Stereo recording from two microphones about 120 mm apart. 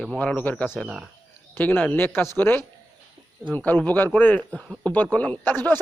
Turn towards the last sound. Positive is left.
turn(degrees=15)  # may be behind; listen again after turning